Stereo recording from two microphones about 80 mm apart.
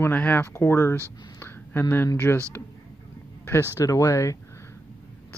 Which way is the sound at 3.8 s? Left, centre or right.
Left.